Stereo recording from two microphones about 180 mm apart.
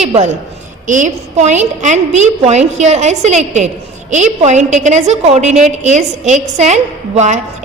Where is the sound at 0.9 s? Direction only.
45° right (ahead or behind).